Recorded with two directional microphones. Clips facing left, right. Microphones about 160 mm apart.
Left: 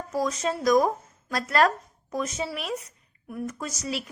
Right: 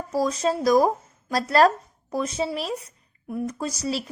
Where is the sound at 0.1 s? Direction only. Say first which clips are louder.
Right 4 dB; 35° right (ahead or behind).